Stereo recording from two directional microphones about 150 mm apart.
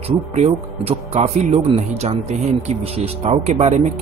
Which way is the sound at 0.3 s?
45° right (ahead or behind).